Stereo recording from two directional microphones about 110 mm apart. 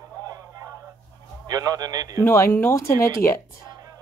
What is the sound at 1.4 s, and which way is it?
Speech, 35° right (ahead or behind).